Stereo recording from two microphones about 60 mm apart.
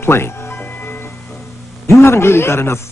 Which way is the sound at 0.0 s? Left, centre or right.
Left.